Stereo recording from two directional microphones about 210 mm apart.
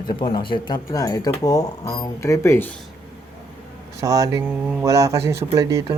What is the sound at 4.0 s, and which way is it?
Speech, 15° right (ahead or behind).